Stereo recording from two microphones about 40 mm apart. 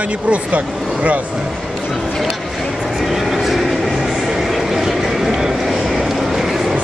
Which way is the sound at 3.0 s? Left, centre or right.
Centre.